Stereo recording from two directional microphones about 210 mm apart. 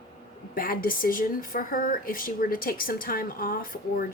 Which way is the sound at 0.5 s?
45° left (ahead or behind).